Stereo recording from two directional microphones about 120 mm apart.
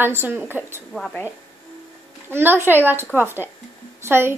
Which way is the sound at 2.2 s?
20° right (ahead or behind).